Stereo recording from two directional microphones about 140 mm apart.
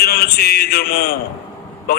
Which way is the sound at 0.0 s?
90° left.